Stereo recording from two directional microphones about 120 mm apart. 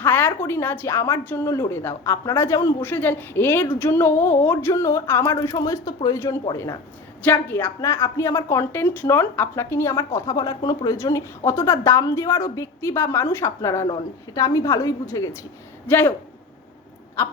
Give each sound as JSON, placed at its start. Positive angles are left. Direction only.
{"t": 0.0, "sound": "a woman's voice", "side_deg": 15}
{"t": 7.2, "sound": "a woman's voice", "side_deg": 15}